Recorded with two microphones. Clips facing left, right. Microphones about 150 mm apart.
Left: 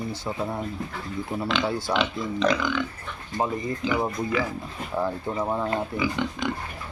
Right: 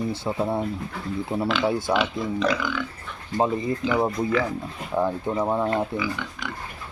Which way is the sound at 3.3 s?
25° right (ahead or behind).